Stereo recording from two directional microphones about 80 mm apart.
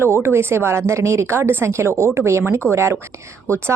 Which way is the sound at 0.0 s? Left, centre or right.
Right.